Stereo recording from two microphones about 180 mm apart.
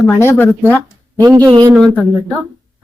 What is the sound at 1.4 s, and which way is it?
Speech, 20° right (ahead or behind).